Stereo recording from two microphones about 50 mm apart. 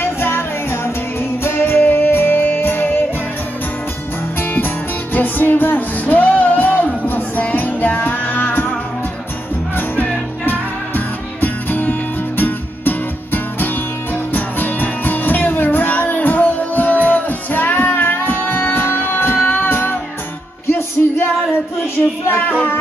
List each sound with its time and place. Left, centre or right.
0.0 s music: left
4.4 s music: left
11.8 s music: left
21.0 s music: left